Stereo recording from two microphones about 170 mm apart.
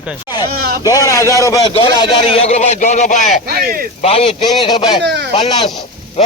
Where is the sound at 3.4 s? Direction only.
60° right (ahead or behind).